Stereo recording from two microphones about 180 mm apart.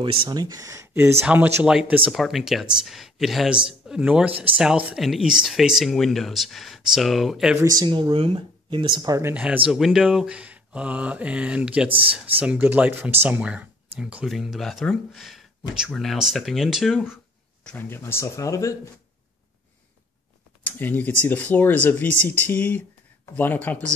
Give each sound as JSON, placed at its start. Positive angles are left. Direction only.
{"t": 0.0, "sound": "speech", "side_deg": -30}
{"t": 7.6, "sound": "speech", "side_deg": -25}
{"t": 9.3, "sound": "speech", "side_deg": -5}
{"t": 17.6, "sound": "speech", "side_deg": 10}
{"t": 20.6, "sound": "speech", "side_deg": 10}